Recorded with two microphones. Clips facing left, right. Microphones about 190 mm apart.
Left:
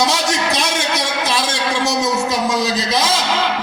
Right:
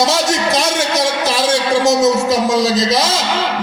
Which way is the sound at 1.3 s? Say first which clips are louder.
Right 6 dB; 40° right (ahead or behind).